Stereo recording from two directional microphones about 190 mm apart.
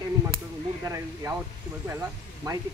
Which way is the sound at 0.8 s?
15° right (ahead or behind).